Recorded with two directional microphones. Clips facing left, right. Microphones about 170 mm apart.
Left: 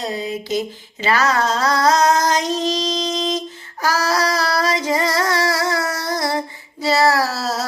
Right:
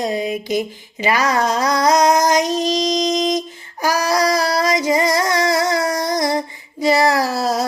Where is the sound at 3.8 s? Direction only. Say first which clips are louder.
Right 2 dB; 15° right (ahead or behind).